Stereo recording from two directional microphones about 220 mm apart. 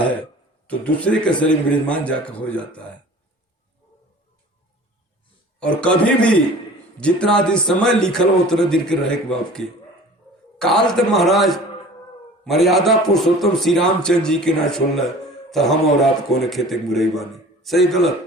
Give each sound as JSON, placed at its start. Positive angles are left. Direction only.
{"t": 0.7, "sound": "a man's voice", "side_deg": 5}
{"t": 5.5, "sound": "a man's voice", "side_deg": 5}